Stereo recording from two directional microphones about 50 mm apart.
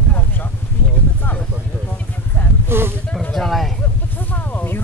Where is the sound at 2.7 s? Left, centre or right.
Right.